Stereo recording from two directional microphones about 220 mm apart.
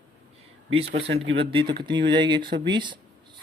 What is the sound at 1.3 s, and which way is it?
Speech, 25° right (ahead or behind).